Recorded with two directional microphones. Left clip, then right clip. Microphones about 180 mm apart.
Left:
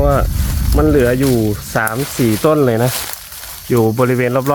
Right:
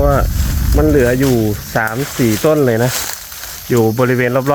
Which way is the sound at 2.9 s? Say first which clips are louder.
Right 2 dB; centre (ahead or behind).